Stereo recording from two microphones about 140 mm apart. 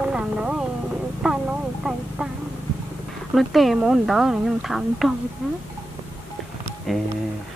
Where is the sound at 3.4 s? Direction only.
Centre (ahead or behind).